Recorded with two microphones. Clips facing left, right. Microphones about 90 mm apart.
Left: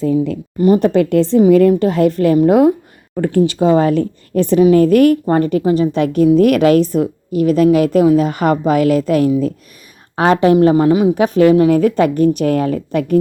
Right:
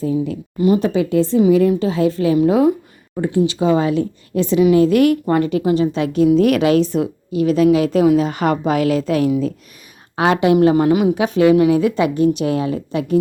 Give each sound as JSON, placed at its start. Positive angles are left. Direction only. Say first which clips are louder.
{"t": 0.0, "sound": "a woman's voice", "louder": "left 4 dB", "side_deg": 70}
{"t": 0.6, "sound": "a woman's voice", "louder": "left 3 dB", "side_deg": 45}
{"t": 0.9, "sound": "a woman's voice", "louder": "left 4 dB", "side_deg": 65}
{"t": 1.4, "sound": "a woman's voice", "louder": "left 5 dB", "side_deg": 55}
{"t": 11.1, "sound": "a woman's voice", "louder": "left 3 dB", "side_deg": 45}